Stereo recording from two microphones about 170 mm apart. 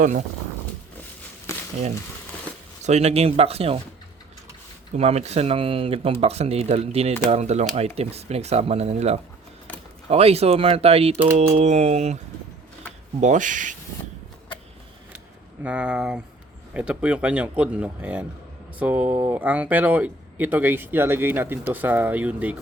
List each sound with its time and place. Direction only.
2.8 s speech: 40° right (ahead or behind)
4.9 s speech: 40° right (ahead or behind)
13.2 s speech: 50° right (ahead or behind)
15.6 s speech: 10° right (ahead or behind)